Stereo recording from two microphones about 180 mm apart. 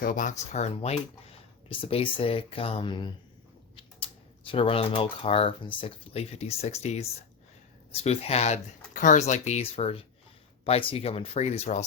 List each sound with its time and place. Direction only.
0.0 s speech: 50° left (ahead or behind); by 3.1 s 25° left (ahead or behind)
4.5 s speech: 30° left (ahead or behind)